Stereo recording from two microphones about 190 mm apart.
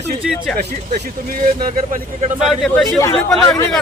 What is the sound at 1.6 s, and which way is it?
Speech, 50° right (ahead or behind).